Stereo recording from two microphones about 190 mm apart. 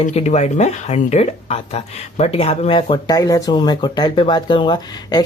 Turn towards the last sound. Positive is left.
turn(degrees=20)  # may be behind; listen again after turning